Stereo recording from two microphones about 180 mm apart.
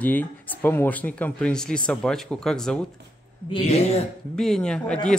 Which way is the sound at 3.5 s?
35° left (ahead or behind).